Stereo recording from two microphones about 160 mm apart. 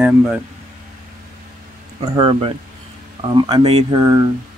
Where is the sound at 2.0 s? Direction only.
30° right (ahead or behind).